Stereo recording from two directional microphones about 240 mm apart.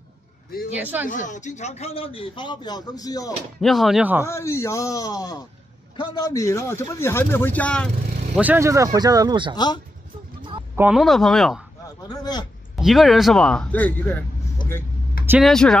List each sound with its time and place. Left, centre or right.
0.5 s speech: left
0.7 s speech: centre
1.0 s a man's voice: left; by 3.3 s centre
3.6 s speech: centre
4.3 s speech: centre
8.4 s speech: centre
10.8 s speech: centre
12.1 s speech: centre
12.7 s speech: centre
15.2 s speech: centre